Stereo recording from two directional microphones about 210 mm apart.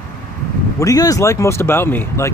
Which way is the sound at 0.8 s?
15° left (ahead or behind).